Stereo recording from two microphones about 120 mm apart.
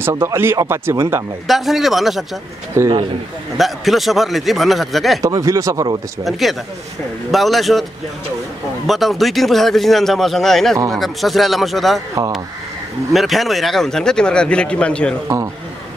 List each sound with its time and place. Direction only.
0.0 s speech: 20° right (ahead or behind)
1.5 s a man's voice: centre (ahead or behind)
2.8 s speech: 20° right (ahead or behind)
3.5 s a man's voice: centre (ahead or behind)
5.2 s speech: 30° right (ahead or behind)
7.2 s a man's voice: centre (ahead or behind)
8.8 s a man's voice: centre (ahead or behind)
13.1 s a man's voice: centre (ahead or behind)